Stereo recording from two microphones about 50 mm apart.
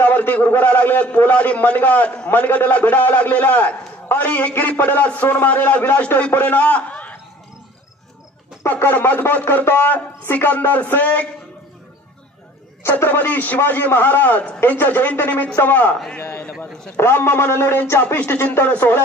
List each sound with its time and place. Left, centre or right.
0.0 s a man's voice: left
8.8 s a man's voice: left
12.9 s a man's voice: left
16.9 s speech: left